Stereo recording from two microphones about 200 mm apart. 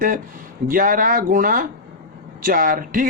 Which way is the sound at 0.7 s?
45° right (ahead or behind).